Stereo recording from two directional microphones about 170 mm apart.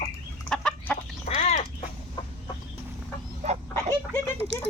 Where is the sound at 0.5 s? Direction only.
5° left (ahead or behind).